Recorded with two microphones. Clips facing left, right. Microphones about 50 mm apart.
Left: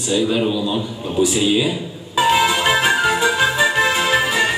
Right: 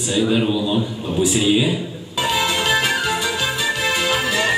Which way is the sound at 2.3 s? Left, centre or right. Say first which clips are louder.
Left 1 dB; centre.